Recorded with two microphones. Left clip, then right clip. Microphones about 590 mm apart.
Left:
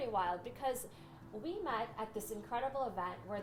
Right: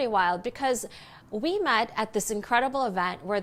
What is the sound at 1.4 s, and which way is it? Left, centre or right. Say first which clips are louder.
A woman's voice: right 14 dB; right.